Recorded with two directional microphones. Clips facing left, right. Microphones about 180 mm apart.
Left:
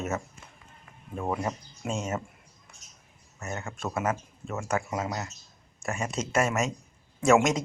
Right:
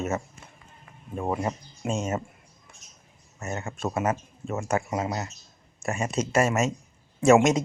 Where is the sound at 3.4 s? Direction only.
20° right (ahead or behind).